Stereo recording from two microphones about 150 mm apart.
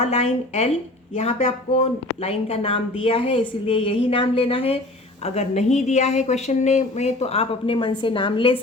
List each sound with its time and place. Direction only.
0.0 s speech: 40° left (ahead or behind)